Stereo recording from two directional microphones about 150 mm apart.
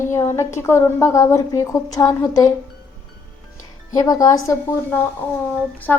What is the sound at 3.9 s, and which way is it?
Speech, 25° left (ahead or behind).